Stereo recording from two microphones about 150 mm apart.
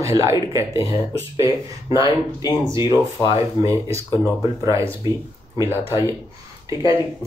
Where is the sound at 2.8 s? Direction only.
30° left (ahead or behind).